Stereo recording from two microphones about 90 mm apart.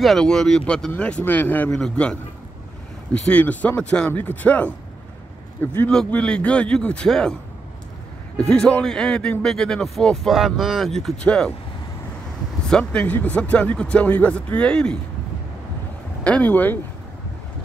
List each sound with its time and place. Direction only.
0.0 s speech: 5° left (ahead or behind); by 1.7 s 20° left (ahead or behind)
1.7 s speech: 10° left (ahead or behind)
5.9 s speech: 10° left (ahead or behind)
8.5 s speech: 10° left (ahead or behind)
12.6 s speech: 10° left (ahead or behind)
16.3 s speech: 15° left (ahead or behind)